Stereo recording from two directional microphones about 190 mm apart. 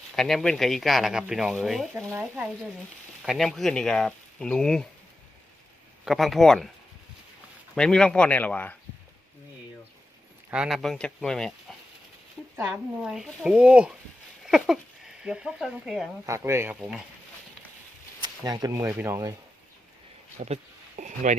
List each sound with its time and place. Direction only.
0.2 s speech: centre (ahead or behind)
3.2 s speech: centre (ahead or behind)
6.1 s speech: centre (ahead or behind)
7.8 s speech: 5° left (ahead or behind)
10.5 s speech: 5° right (ahead or behind)
12.7 s speech: 5° right (ahead or behind)
16.2 s speech: 15° right (ahead or behind)
18.2 s speech: 20° right (ahead or behind)
20.4 s a sound: 35° right (ahead or behind)